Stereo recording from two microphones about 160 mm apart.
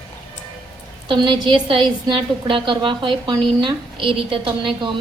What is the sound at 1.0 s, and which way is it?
A woman's voice, 30° right (ahead or behind).